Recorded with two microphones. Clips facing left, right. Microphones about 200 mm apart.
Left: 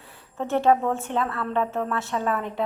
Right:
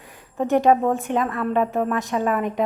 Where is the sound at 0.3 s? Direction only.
15° right (ahead or behind).